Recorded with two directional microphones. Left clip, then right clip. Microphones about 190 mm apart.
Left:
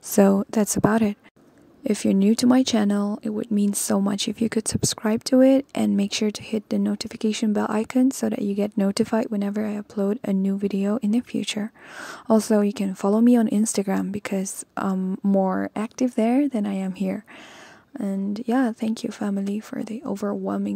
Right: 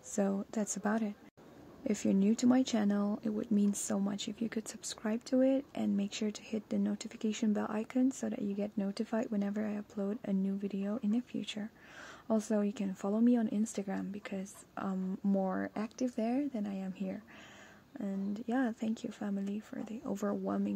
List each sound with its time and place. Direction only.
0.1 s a woman's voice: 45° left (ahead or behind); by 20.7 s 25° left (ahead or behind)